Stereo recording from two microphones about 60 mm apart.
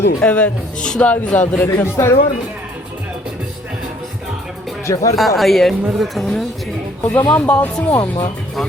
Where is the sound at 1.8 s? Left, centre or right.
Left.